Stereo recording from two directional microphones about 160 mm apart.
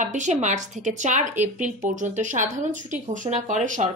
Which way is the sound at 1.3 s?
10° right (ahead or behind).